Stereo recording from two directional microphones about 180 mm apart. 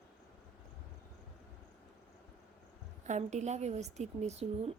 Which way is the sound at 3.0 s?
40° right (ahead or behind).